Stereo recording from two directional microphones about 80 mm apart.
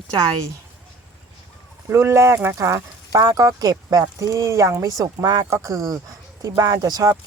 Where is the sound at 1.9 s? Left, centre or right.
Right.